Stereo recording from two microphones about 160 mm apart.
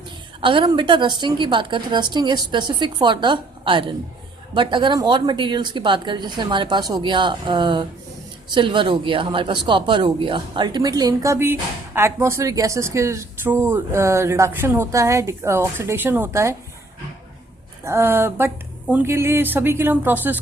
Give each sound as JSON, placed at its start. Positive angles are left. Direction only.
{"t": 0.4, "sound": "a woman's voice", "side_deg": -30}
{"t": 17.8, "sound": "speech", "side_deg": -15}